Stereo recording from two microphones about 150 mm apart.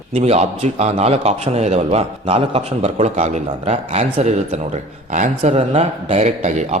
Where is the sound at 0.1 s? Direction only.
45° right (ahead or behind).